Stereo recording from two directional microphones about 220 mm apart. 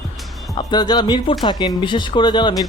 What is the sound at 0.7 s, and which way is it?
Speech, 20° left (ahead or behind).